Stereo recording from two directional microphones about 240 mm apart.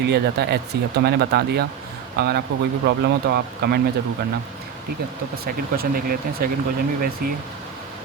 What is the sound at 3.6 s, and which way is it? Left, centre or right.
Speech, right.